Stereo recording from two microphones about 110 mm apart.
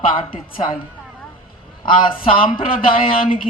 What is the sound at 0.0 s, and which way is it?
Speech, 55° left (ahead or behind).